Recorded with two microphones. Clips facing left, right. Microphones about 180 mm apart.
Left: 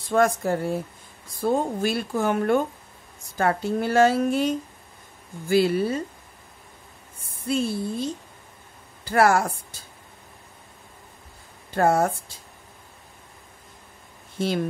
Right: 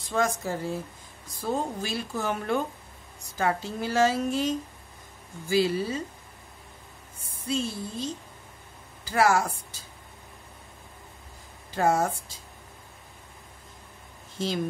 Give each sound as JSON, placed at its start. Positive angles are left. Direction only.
{"t": 0.1, "sound": "speech", "side_deg": 55}
{"t": 7.4, "sound": "speech", "side_deg": 55}
{"t": 11.7, "sound": "speech", "side_deg": 55}